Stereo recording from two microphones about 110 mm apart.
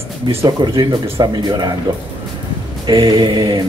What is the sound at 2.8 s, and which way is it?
Speech, 40° right (ahead or behind).